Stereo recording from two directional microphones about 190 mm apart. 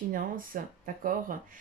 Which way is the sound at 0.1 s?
45° right (ahead or behind).